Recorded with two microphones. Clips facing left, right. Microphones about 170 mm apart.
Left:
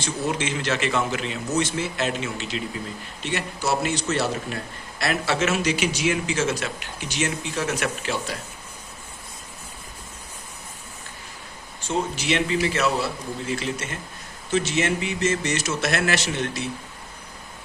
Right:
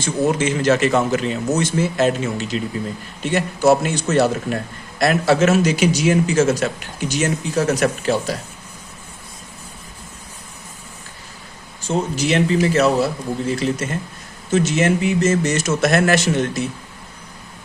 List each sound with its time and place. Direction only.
0.0 s speech: 45° right (ahead or behind)
11.9 s speech: 40° right (ahead or behind)